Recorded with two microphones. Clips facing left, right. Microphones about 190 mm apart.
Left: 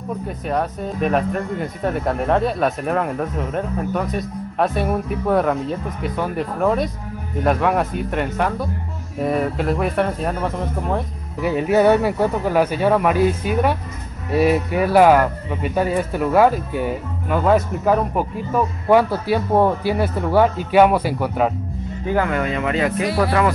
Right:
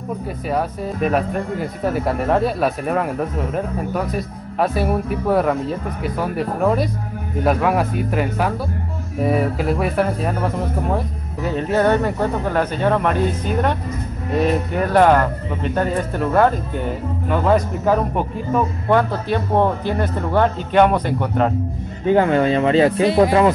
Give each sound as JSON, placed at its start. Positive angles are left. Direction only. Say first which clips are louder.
{"t": 0.5, "sound": "speech", "louder": "right 1 dB", "side_deg": -5}
{"t": 11.4, "sound": "speech", "louder": "left 2 dB", "side_deg": 10}
{"t": 22.0, "sound": "speech", "louder": "right 5 dB", "side_deg": -25}